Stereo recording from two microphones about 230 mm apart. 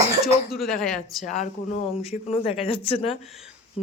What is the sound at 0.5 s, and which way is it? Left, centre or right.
Speech, centre.